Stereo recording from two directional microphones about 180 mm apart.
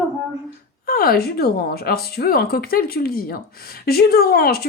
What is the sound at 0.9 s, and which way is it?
A woman's voice, 55° left (ahead or behind).